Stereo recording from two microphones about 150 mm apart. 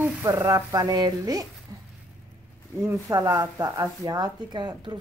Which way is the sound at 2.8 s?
20° right (ahead or behind).